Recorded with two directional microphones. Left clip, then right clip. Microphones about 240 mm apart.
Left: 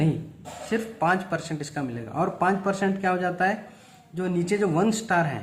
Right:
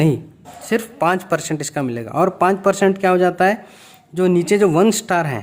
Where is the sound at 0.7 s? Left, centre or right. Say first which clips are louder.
Right 6 dB; right.